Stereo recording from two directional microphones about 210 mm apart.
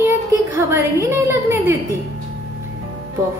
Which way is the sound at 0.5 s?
10° right (ahead or behind).